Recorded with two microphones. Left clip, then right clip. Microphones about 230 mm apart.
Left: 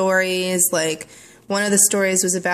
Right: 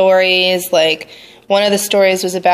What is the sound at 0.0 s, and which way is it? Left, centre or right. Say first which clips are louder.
Speech: right 8 dB; left.